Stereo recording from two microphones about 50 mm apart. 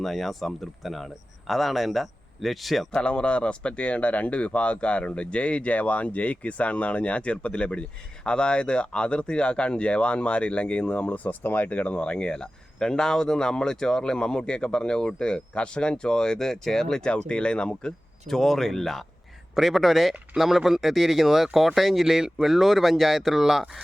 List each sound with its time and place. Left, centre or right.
0.0 s speech: centre
2.9 s speech: left
18.3 s speech: centre